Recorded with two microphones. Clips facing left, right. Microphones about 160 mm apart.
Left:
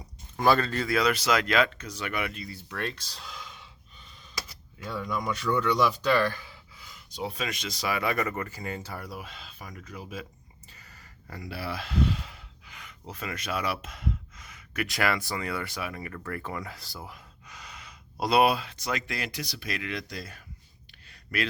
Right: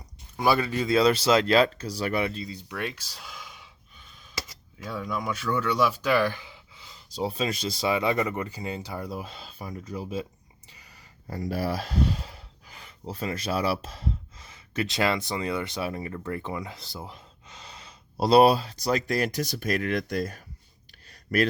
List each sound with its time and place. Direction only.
0.3 s speech: 10° right (ahead or behind)
0.9 s speech: 30° right (ahead or behind)
2.5 s speech: 15° right (ahead or behind)
4.8 s speech: 5° right (ahead or behind); by 10.2 s 30° right (ahead or behind)
10.7 s a sound: 15° right (ahead or behind)
11.3 s speech: 40° right (ahead or behind)